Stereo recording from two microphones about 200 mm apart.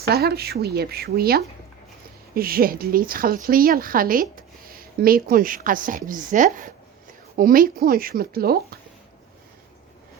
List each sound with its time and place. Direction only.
0.1 s a woman's voice: 50° right (ahead or behind)